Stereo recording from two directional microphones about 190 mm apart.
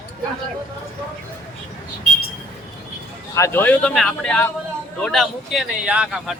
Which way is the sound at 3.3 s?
15° left (ahead or behind).